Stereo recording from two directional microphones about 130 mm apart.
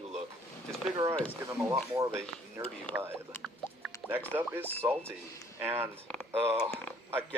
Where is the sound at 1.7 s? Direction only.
25° right (ahead or behind).